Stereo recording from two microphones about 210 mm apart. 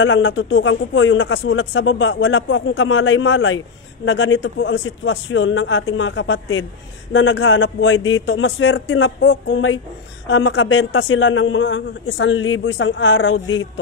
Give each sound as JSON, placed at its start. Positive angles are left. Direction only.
{"t": 0.0, "sound": "a man's voice", "side_deg": 65}